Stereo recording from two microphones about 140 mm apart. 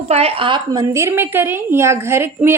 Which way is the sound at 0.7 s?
25° right (ahead or behind).